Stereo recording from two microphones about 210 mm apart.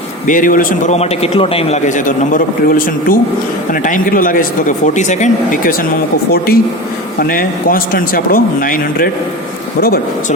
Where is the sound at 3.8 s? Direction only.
40° left (ahead or behind).